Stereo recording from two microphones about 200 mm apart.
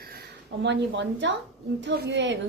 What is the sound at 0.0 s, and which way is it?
A woman's voice, 50° right (ahead or behind).